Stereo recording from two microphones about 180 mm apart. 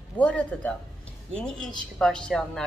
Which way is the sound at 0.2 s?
10° left (ahead or behind).